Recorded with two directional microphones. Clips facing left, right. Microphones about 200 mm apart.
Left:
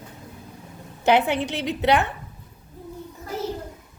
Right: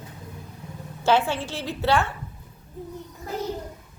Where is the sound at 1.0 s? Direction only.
20° left (ahead or behind).